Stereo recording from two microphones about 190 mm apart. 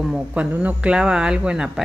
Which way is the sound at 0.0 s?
5° right (ahead or behind).